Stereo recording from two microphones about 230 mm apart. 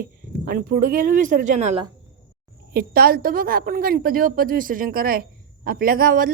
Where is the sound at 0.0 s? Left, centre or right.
Right.